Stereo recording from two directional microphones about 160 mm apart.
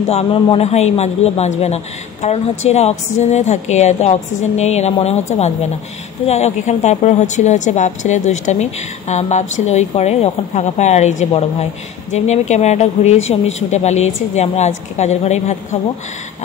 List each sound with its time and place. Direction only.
0.1 s a man's voice: 35° left (ahead or behind)